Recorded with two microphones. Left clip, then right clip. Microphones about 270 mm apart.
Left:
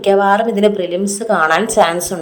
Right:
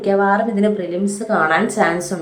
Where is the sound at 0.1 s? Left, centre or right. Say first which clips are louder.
Left 4 dB; left.